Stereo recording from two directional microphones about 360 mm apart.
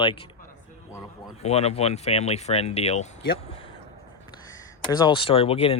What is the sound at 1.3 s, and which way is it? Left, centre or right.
Speech, centre.